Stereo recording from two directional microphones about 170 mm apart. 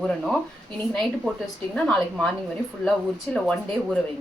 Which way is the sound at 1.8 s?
5° left (ahead or behind).